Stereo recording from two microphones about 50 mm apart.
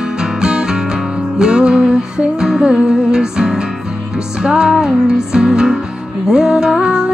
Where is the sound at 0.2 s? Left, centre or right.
Centre.